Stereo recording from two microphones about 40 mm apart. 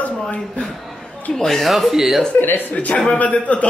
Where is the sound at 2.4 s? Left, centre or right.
Left.